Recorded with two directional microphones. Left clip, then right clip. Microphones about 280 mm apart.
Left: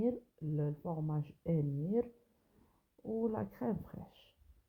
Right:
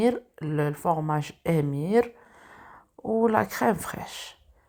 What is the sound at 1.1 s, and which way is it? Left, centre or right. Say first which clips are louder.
Speech: right 13 dB; centre.